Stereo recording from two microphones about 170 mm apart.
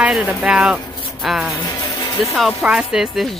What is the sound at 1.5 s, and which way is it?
Speech, 25° left (ahead or behind).